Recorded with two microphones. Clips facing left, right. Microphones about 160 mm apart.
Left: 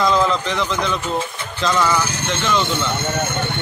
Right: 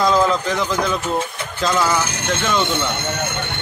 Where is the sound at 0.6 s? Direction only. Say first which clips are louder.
Right 1 dB; 5° right (ahead or behind).